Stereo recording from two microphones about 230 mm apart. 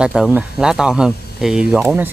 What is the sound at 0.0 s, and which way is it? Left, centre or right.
Speech, centre.